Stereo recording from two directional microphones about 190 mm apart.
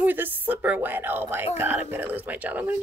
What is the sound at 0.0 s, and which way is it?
Speech, 10° right (ahead or behind).